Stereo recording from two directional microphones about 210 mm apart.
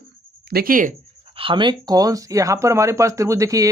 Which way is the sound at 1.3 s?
25° right (ahead or behind).